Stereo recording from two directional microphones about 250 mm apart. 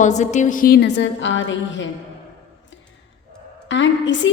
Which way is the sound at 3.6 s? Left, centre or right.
Left.